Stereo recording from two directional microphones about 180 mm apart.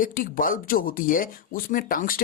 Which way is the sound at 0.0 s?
50° left (ahead or behind).